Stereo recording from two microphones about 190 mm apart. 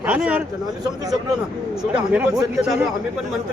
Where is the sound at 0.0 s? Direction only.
5° right (ahead or behind).